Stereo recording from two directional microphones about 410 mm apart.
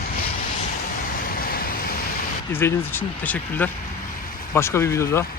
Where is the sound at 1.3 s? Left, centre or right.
Left.